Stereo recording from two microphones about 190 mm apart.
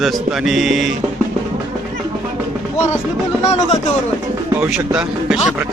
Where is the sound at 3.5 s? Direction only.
35° left (ahead or behind).